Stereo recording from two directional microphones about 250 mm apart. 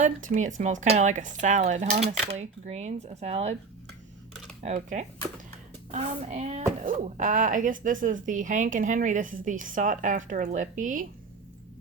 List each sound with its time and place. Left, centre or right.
0.0 s speech: right
4.6 s speech: right